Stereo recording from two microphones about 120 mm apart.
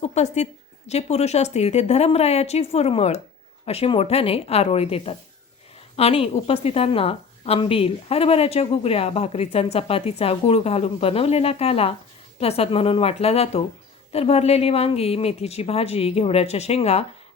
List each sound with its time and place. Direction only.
0.0 s a woman's voice: 70° left (ahead or behind)